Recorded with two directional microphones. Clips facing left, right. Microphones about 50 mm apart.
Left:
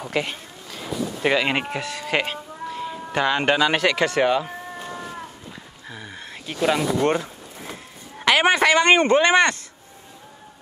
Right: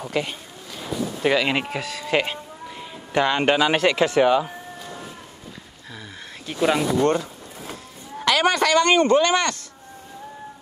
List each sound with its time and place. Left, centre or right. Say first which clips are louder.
0.0 s speech: even; centre
6.1 s speech: right 2 dB; centre
7.0 s speech: right 1 dB; centre
7.7 s a sound: right 3 dB; left